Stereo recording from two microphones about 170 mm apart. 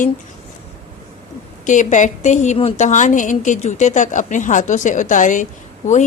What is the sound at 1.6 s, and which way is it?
A woman's voice, 45° left (ahead or behind).